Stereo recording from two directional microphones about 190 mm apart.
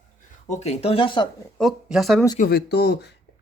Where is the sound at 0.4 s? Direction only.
35° left (ahead or behind).